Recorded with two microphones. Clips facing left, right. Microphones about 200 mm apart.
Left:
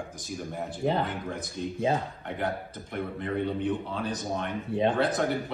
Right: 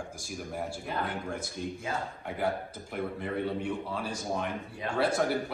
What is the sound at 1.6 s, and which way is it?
Speech, 5° right (ahead or behind).